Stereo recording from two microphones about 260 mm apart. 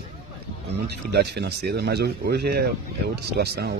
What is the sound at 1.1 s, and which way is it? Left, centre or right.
A man's voice, right.